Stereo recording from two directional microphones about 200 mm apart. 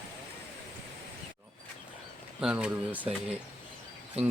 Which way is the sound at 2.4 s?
5° right (ahead or behind).